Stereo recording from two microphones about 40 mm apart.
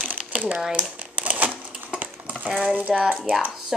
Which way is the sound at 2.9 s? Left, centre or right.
Centre.